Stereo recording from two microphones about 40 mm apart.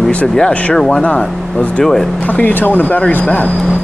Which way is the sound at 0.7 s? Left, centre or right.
Centre.